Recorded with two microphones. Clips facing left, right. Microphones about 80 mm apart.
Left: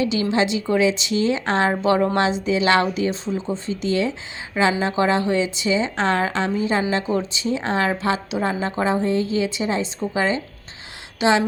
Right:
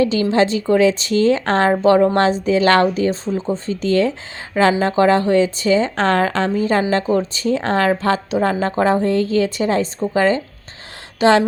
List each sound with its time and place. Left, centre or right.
0.0 s a woman's voice: right
1.7 s a woman's voice: right